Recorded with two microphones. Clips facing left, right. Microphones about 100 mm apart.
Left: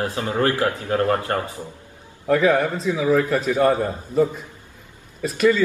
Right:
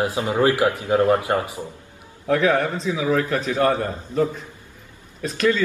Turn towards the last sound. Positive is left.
turn(degrees=5)  # may be behind; listen again after turning